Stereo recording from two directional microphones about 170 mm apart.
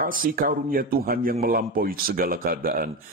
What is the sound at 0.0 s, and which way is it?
A man's voice, 55° right (ahead or behind).